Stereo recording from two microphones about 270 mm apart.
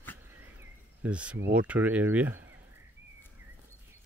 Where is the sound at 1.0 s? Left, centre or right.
Centre.